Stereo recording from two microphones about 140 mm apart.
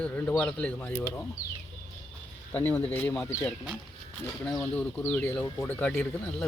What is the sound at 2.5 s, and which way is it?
Speech, 15° left (ahead or behind).